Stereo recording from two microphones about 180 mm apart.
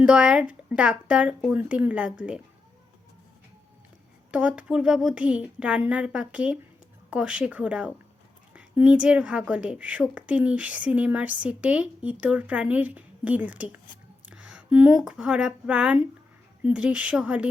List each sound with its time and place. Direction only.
0.0 s a woman's voice: 5° right (ahead or behind)
4.3 s a woman's voice: 5° right (ahead or behind)